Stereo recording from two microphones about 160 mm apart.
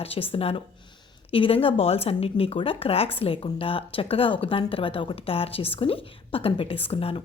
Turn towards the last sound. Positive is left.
turn(degrees=35)  # may be behind; listen again after turning